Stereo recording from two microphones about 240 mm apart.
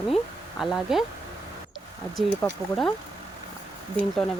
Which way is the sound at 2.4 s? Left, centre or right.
Centre.